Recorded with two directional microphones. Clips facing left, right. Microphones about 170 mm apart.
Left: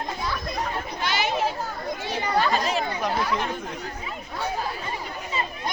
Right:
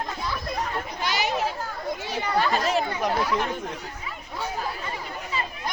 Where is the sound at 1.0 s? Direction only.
40° right (ahead or behind).